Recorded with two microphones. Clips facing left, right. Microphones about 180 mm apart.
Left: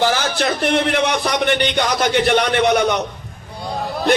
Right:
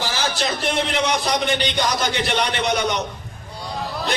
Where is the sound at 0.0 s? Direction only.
60° left (ahead or behind).